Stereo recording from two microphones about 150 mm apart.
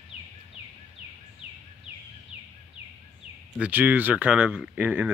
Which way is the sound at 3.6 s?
10° right (ahead or behind).